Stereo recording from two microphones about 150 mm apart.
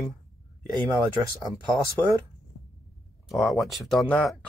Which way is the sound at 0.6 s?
25° right (ahead or behind).